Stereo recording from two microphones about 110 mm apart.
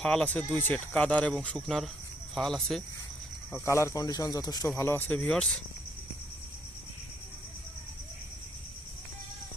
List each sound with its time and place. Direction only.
0.0 s speech: 5° left (ahead or behind)
3.5 s speech: 25° left (ahead or behind)
4.8 s speech: 20° left (ahead or behind)